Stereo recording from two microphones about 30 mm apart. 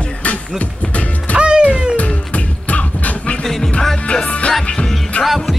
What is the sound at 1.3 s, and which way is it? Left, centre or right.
Music, right.